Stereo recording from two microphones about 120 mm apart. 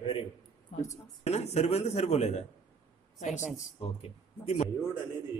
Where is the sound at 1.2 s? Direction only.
65° left (ahead or behind).